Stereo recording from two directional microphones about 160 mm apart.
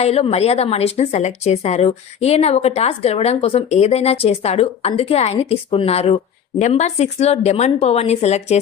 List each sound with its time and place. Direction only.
0.0 s a woman's voice: 40° left (ahead or behind)